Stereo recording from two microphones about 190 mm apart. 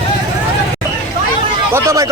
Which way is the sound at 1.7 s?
15° right (ahead or behind).